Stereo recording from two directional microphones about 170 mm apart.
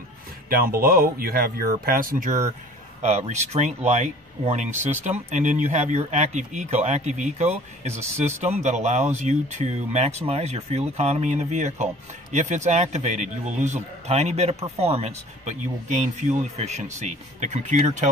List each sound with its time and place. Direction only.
0.5 s speech: 60° right (ahead or behind)